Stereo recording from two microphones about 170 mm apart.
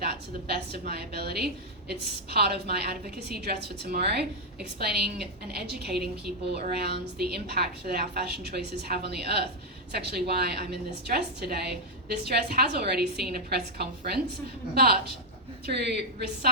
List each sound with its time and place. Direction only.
0.0 s a woman's voice: 70° right (ahead or behind)
15.6 s a woman's voice: 70° right (ahead or behind)